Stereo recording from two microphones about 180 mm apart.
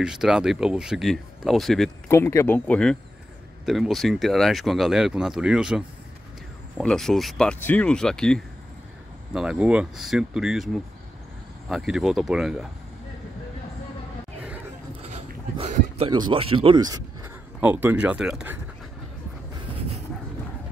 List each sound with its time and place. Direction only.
0.0 s speech: 5° right (ahead or behind)
2.0 s speech: 15° left (ahead or behind); by 12.6 s 5° right (ahead or behind)
15.0 s a sound: 35° right (ahead or behind)
17.6 s speech: 10° right (ahead or behind)